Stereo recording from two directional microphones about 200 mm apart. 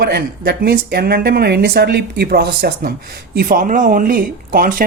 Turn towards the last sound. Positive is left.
turn(degrees=-45)  # may be behind; listen again after turning